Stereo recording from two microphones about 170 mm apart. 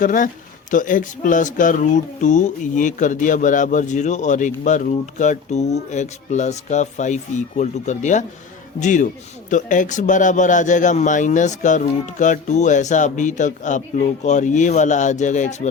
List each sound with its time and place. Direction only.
0.0 s speech: 50° left (ahead or behind)